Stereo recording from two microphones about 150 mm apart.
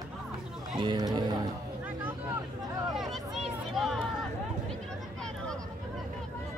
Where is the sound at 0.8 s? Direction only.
30° right (ahead or behind).